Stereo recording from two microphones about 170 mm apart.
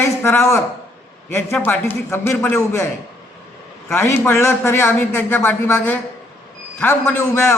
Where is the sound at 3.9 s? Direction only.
15° left (ahead or behind).